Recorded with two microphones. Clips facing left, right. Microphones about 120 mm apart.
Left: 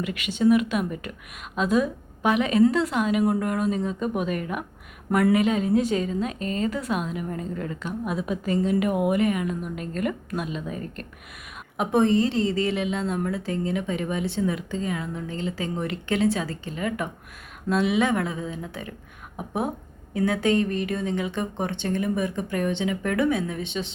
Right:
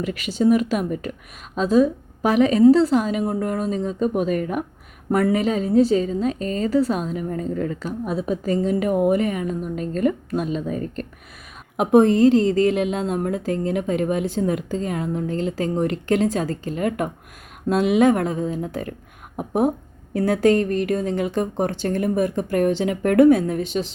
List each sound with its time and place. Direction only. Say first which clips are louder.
0.0 s a woman's voice: right 2 dB; 35° right (ahead or behind)
11.8 s speech: right 6 dB; 50° right (ahead or behind)
20.1 s speech: right 5 dB; 40° right (ahead or behind)